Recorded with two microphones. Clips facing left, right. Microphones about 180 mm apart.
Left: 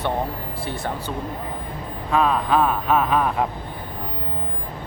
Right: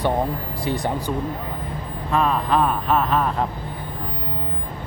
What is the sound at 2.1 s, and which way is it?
Speech, centre (ahead or behind).